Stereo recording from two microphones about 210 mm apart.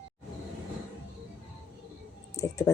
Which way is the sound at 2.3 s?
15° left (ahead or behind).